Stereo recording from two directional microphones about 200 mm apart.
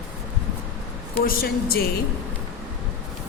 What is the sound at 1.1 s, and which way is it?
Speech, 45° left (ahead or behind).